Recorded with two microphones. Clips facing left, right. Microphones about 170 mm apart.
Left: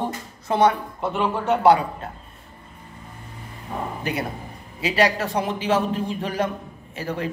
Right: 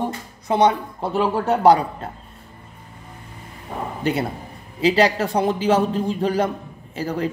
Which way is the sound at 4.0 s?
30° right (ahead or behind).